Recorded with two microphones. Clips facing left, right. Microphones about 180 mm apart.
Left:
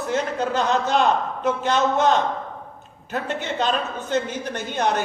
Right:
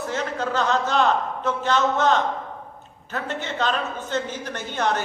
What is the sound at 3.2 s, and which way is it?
A man's voice, 15° left (ahead or behind).